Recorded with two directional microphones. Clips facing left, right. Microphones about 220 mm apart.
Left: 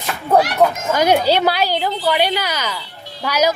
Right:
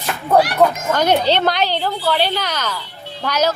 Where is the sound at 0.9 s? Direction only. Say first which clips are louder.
Left 1 dB; 10° left (ahead or behind).